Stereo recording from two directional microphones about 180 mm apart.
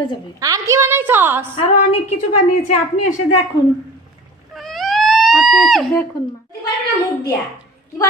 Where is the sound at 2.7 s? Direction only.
40° left (ahead or behind).